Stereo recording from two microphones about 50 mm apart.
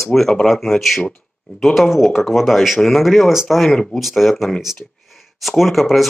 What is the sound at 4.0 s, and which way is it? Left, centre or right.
Speech, centre.